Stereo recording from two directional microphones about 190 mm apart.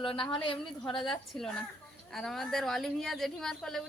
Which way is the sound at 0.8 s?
Centre (ahead or behind).